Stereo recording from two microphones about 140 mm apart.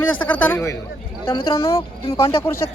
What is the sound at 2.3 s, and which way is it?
Speech, 40° left (ahead or behind).